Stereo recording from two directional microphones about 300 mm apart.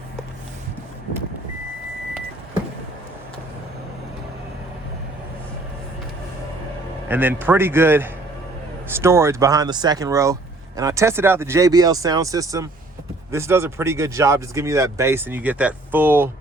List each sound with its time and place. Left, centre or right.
7.1 s speech: centre